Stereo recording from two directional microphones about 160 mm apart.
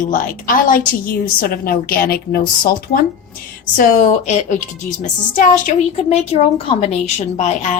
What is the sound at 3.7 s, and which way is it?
A woman's voice, 50° left (ahead or behind).